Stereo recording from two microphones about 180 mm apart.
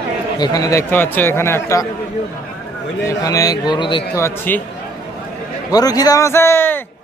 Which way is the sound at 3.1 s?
20° left (ahead or behind).